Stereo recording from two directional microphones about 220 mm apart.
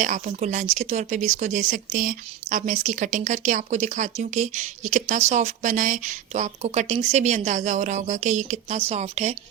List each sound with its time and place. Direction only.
0.0 s speech: 35° right (ahead or behind)